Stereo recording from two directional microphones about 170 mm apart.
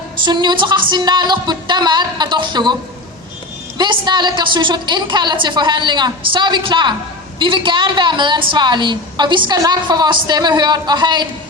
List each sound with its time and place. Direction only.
0.3 s a woman's voice: 25° right (ahead or behind)
3.8 s a woman's voice: 25° right (ahead or behind)